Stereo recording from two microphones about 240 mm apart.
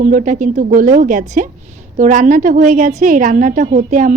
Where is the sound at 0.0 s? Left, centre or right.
Right.